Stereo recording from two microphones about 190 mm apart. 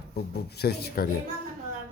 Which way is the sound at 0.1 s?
55° left (ahead or behind).